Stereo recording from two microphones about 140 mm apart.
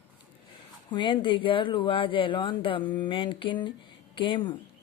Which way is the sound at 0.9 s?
35° left (ahead or behind).